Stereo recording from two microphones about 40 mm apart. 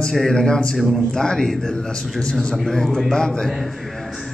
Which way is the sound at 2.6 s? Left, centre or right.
Centre.